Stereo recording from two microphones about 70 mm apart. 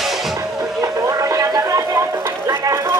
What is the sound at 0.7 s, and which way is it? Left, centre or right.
Music, right.